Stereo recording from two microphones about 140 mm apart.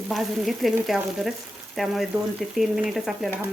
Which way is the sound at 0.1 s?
Centre (ahead or behind).